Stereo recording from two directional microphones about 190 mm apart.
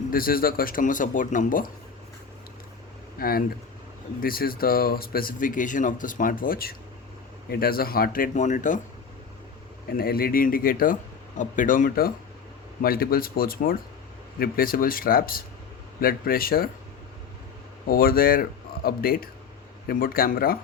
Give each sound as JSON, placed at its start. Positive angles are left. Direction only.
{"t": 0.1, "sound": "speech", "side_deg": 50}
{"t": 3.2, "sound": "speech", "side_deg": 50}
{"t": 9.9, "sound": "speech", "side_deg": 50}
{"t": 17.8, "sound": "speech", "side_deg": 50}